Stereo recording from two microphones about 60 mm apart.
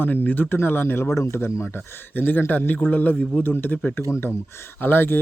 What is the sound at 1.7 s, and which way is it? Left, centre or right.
Speech, left.